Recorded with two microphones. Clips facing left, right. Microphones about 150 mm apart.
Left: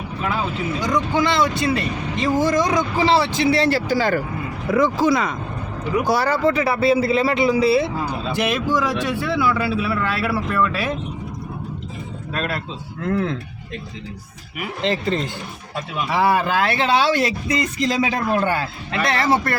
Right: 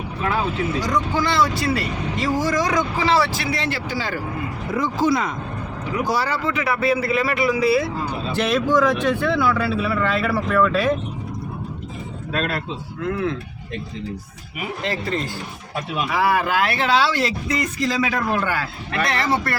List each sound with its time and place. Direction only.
1.1 s speech: 20° left (ahead or behind)
3.6 s speech: 40° left (ahead or behind)
4.7 s speech: 90° left
6.1 s speech: 55° left (ahead or behind); by 7.9 s 25° left (ahead or behind)
8.3 s speech: 10° left (ahead or behind)
13.1 s speech: 40° left (ahead or behind)
14.8 s speech: 25° left (ahead or behind)